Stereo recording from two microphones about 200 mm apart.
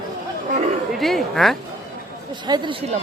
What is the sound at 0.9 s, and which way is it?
Speech, centre (ahead or behind).